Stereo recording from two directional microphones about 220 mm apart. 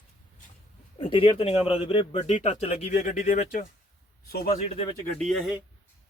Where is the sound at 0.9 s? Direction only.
25° left (ahead or behind).